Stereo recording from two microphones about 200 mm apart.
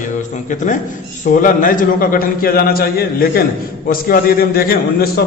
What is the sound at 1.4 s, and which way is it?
A man's voice, 40° left (ahead or behind).